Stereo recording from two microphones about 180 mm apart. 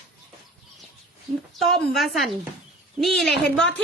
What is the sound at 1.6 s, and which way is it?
A woman's voice, centre (ahead or behind).